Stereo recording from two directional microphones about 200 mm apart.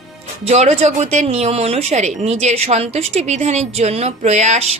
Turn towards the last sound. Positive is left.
turn(degrees=-35)  # may be behind; listen again after turning